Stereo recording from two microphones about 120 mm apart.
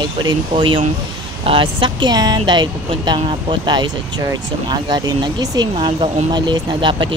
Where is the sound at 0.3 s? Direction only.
45° right (ahead or behind).